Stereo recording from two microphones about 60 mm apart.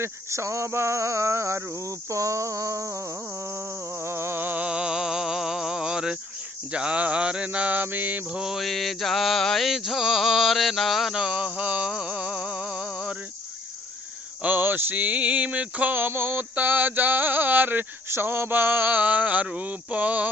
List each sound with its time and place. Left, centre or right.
0.0 s cricket: right
3.9 s male singing: right
4.6 s a sound: centre
6.7 s mantra: centre
8.4 s mantra: centre
8.6 s music: centre
11.3 s mantra: right
11.9 s a sound: centre
14.4 s male singing: right
19.5 s mantra: right